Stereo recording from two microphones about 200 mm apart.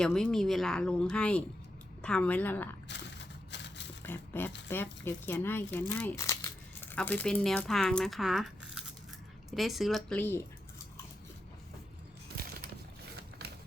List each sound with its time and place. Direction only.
0.0 s speech: 5° left (ahead or behind)
2.9 s mechanisms: 60° left (ahead or behind)
3.5 s a sound: 60° left (ahead or behind)
4.0 s dog: 10° left (ahead or behind)
4.7 s speech: 10° left (ahead or behind)
12.4 s crushing: 50° right (ahead or behind)